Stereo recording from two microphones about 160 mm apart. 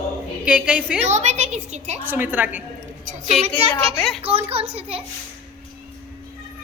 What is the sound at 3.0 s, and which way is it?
Speech, 45° right (ahead or behind).